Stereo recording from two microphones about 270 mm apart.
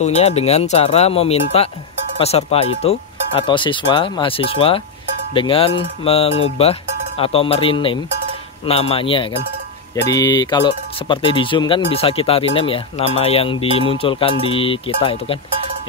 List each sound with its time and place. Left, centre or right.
0.0 s speech: left